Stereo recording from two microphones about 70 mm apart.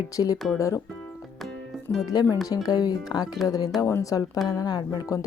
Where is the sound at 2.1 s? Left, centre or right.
Left.